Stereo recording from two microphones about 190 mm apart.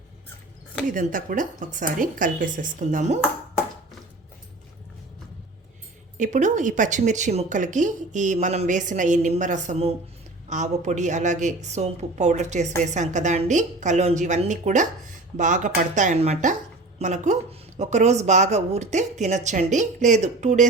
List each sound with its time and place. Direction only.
0.9 s a woman's voice: 45° right (ahead or behind)
6.1 s speech: 40° right (ahead or behind)